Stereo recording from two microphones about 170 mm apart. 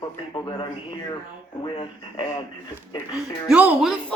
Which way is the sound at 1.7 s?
30° left (ahead or behind).